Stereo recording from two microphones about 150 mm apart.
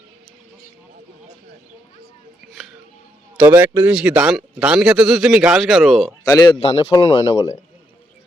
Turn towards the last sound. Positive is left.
turn(degrees=40)  # may be behind; listen again after turning